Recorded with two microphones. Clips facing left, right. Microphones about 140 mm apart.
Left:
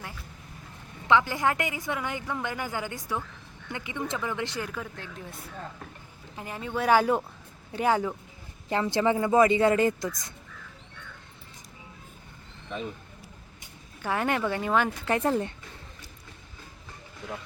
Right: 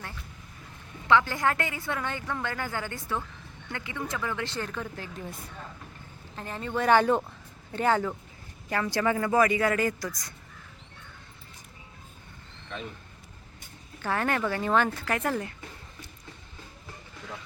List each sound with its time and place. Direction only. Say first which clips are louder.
1.0 s a woman's voice: even; 15° left (ahead or behind)
6.3 s a woman's voice: right 1 dB; 10° left (ahead or behind)
8.7 s speech: left 2 dB; 20° left (ahead or behind)
14.0 s a woman's voice: left 1 dB; 15° left (ahead or behind)
15.0 s speech: left 3 dB; 25° left (ahead or behind)
17.2 s a woman's voice: left 4 dB; 10° left (ahead or behind)